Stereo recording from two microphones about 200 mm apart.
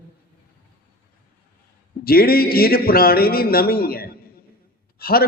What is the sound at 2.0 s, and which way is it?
A man's voice, 50° left (ahead or behind).